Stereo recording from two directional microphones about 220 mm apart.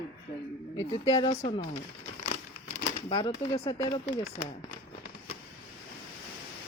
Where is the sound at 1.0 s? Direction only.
20° left (ahead or behind).